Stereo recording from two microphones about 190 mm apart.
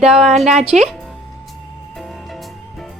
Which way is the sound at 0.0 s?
Centre (ahead or behind).